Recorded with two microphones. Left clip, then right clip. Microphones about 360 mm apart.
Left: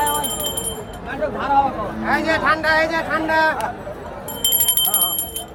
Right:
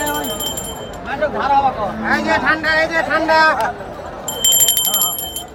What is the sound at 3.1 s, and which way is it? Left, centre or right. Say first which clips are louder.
Speech: right 6 dB; centre.